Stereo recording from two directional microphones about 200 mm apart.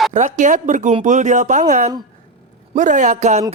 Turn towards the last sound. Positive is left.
turn(degrees=-35)  # may be behind; listen again after turning